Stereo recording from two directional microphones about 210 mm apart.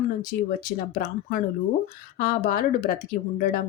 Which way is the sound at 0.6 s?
45° left (ahead or behind).